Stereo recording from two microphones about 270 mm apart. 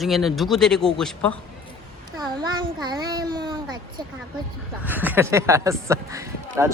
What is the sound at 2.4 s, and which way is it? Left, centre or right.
Speech, centre.